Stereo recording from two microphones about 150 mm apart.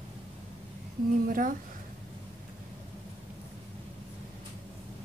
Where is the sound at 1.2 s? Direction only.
65° right (ahead or behind).